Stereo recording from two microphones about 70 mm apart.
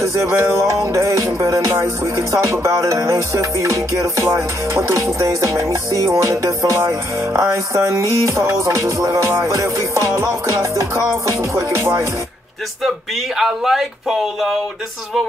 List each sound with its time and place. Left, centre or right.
0.0 s music: right
12.8 s speech: centre